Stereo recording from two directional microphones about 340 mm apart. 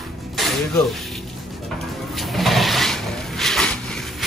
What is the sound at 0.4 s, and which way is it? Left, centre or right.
Speech, centre.